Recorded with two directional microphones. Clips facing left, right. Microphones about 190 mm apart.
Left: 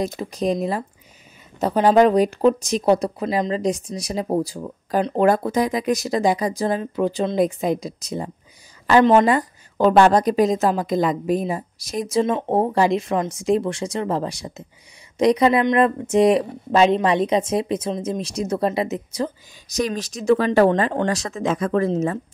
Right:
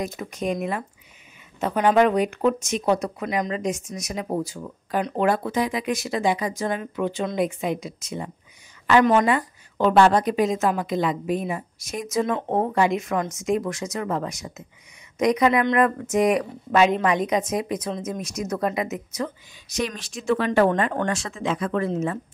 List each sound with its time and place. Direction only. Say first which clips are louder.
0.0 s speech: left 5 dB; 30° left (ahead or behind)